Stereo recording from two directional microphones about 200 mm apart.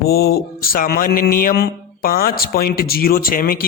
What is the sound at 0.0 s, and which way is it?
Mantra, 50° left (ahead or behind).